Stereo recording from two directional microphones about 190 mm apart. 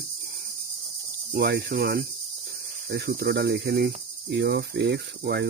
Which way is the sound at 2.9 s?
55° right (ahead or behind).